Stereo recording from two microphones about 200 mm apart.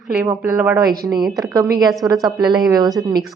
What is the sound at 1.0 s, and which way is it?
A woman's voice, 20° right (ahead or behind).